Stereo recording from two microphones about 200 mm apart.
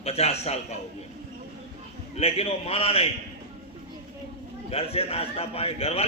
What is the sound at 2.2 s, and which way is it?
Speech, 30° left (ahead or behind).